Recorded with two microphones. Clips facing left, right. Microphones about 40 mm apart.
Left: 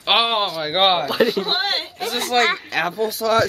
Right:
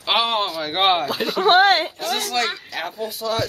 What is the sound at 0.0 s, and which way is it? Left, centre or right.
Speech, left.